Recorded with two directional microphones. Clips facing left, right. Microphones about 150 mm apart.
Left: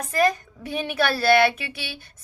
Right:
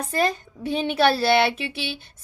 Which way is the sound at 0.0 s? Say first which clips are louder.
Left 2 dB; 30° right (ahead or behind).